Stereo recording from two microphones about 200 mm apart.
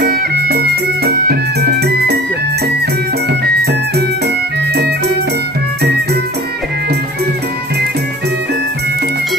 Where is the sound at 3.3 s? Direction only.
55° right (ahead or behind).